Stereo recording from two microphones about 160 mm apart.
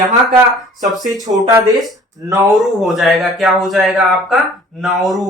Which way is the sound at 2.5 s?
Centre (ahead or behind).